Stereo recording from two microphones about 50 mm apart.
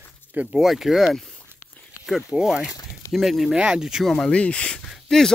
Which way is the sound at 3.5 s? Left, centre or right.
Centre.